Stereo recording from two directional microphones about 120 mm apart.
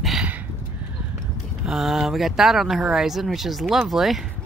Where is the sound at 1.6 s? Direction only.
Centre (ahead or behind).